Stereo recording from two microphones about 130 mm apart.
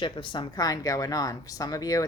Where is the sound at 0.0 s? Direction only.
40° left (ahead or behind).